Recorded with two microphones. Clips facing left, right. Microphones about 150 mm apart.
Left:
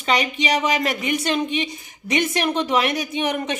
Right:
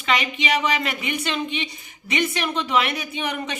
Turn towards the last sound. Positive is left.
turn(degrees=45)  # may be behind; listen again after turning